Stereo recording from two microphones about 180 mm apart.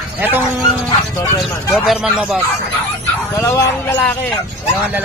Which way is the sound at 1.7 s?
5° right (ahead or behind).